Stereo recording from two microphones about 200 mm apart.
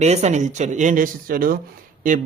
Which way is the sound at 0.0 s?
35° right (ahead or behind).